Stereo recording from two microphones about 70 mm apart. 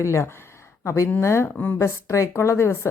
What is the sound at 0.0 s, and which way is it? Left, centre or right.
Speech, left.